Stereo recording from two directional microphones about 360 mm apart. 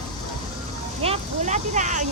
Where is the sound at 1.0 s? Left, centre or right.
Centre.